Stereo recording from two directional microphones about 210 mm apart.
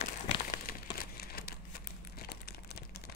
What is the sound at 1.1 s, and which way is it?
Crumpling, 45° left (ahead or behind).